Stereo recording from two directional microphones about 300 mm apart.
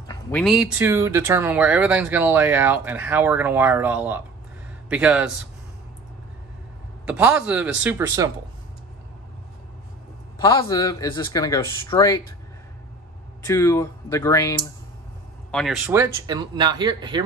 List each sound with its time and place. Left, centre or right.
0.0 s speech: centre
7.1 s speech: centre
10.4 s speech: centre
13.5 s speech: centre
15.5 s speech: centre